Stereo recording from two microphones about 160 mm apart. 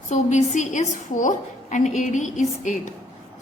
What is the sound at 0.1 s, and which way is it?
A woman's voice, 50° left (ahead or behind).